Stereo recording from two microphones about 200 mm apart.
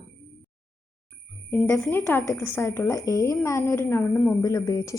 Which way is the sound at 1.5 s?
10° left (ahead or behind).